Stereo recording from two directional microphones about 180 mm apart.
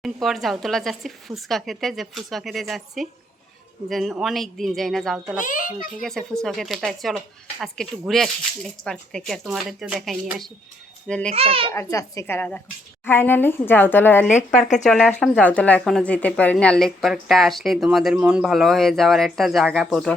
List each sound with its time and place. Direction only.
0.0 s speech: centre (ahead or behind)
5.4 s a child's voice: 50° left (ahead or behind)
6.0 s speech: 5° left (ahead or behind)
11.3 s a child's voice: 30° right (ahead or behind)
11.7 s a woman's voice: 15° left (ahead or behind)